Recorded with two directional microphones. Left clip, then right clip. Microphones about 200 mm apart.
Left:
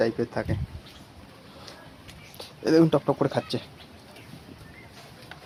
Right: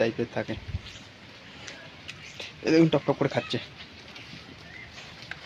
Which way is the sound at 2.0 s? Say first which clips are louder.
Right 5 dB; centre (ahead or behind).